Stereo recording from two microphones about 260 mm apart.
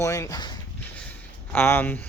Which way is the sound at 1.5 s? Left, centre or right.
Centre.